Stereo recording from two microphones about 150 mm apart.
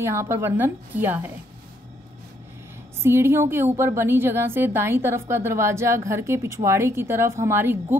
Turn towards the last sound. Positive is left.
turn(degrees=-15)  # may be behind; listen again after turning